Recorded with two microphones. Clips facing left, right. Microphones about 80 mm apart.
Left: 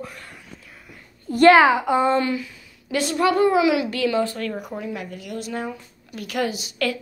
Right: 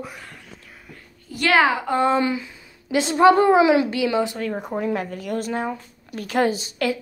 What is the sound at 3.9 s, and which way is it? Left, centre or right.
Speech, centre.